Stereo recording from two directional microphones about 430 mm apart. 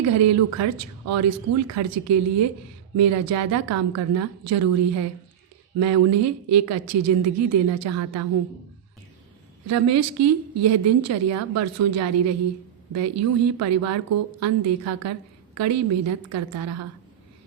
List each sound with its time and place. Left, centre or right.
0.2 s a woman's voice: right
5.8 s a woman's voice: right
9.6 s a woman's voice: right